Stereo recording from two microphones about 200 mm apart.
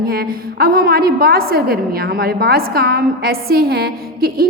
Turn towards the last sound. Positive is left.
turn(degrees=-50)  # may be behind; listen again after turning